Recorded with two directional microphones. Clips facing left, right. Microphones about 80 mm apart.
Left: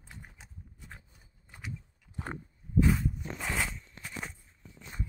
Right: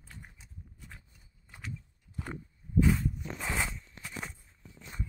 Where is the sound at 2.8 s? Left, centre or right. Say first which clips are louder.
Even; centre.